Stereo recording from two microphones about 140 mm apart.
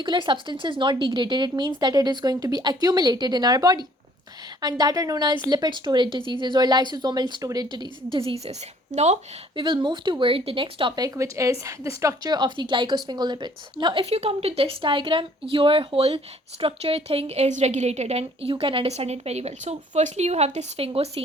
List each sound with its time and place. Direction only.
0.0 s a woman's voice: 35° right (ahead or behind)
8.9 s speech: 55° right (ahead or behind)
9.6 s a woman's voice: 35° right (ahead or behind)